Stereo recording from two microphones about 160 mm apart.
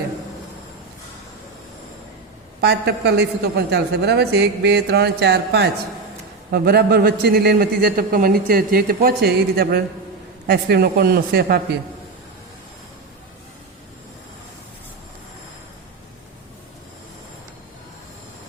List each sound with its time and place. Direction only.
2.6 s a woman's voice: 90° right
6.5 s a man's voice: 75° right (ahead or behind)